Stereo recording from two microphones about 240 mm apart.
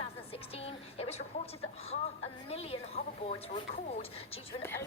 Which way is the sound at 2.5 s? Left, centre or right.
Left.